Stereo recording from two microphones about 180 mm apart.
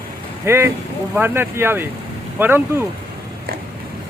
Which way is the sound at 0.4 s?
15° right (ahead or behind).